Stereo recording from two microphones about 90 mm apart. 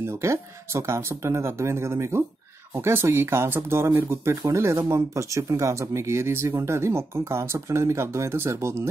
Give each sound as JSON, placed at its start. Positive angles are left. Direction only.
{"t": 0.0, "sound": "speech", "side_deg": -30}